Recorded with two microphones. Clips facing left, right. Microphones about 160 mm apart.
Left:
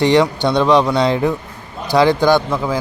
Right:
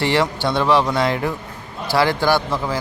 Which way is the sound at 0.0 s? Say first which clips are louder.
Left 6 dB; 20° left (ahead or behind).